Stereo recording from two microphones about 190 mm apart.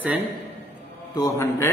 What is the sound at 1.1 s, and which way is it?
Speech, 15° left (ahead or behind).